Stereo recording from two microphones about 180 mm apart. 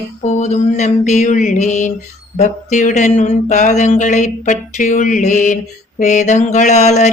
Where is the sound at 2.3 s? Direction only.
45° left (ahead or behind).